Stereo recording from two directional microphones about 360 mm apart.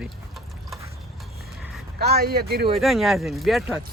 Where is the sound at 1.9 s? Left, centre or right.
Right.